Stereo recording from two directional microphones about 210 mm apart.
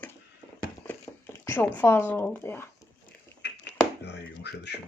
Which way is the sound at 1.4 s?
10° left (ahead or behind).